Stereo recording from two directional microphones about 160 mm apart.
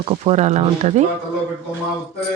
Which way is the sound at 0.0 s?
35° right (ahead or behind).